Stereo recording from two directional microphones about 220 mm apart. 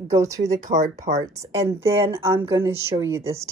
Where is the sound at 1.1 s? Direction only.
15° right (ahead or behind).